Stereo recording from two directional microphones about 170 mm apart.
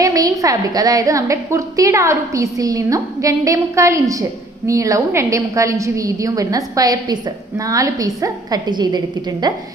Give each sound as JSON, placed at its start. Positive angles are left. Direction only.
{"t": 0.0, "sound": "a woman's voice", "side_deg": -20}